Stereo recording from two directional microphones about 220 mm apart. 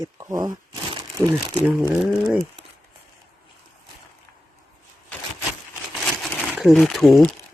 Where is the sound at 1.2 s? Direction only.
5° left (ahead or behind).